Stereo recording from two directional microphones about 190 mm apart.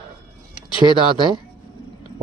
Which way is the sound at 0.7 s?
25° left (ahead or behind).